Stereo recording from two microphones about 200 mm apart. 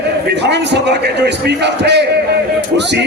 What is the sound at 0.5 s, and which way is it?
A man's voice, 60° right (ahead or behind).